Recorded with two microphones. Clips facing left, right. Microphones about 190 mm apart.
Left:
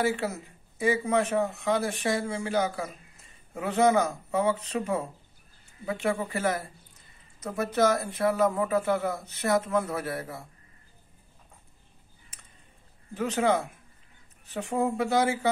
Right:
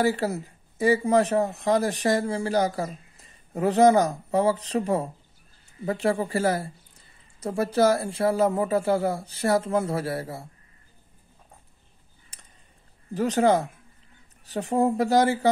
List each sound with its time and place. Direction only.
0.0 s speech: 35° right (ahead or behind)
12.3 s a sound: 35° right (ahead or behind)
13.1 s speech: 35° right (ahead or behind)